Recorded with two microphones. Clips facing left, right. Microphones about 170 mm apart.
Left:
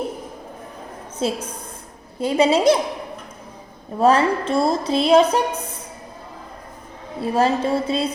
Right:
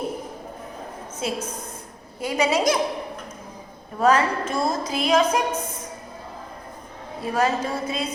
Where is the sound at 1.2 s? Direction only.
30° left (ahead or behind).